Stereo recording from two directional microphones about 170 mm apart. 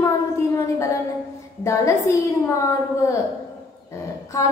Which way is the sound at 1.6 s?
20° left (ahead or behind).